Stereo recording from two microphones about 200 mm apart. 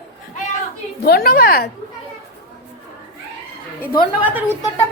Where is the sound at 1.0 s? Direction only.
50° left (ahead or behind).